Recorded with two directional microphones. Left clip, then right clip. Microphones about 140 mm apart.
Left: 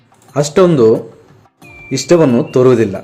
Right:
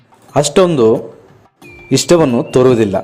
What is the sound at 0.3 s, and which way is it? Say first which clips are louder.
A man's voice: even; 20° right (ahead or behind).